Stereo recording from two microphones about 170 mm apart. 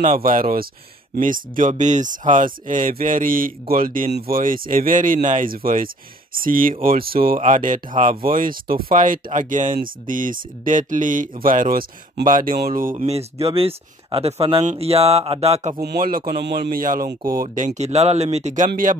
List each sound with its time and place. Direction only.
0.0 s speech: 55° right (ahead or behind)
12.9 s speech: 35° right (ahead or behind)
15.8 s speech: 65° right (ahead or behind); by 18.7 s 45° right (ahead or behind)